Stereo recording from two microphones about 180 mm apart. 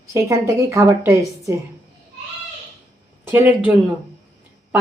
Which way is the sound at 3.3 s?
10° right (ahead or behind).